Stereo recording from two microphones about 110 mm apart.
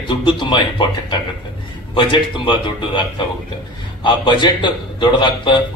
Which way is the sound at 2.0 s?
50° left (ahead or behind).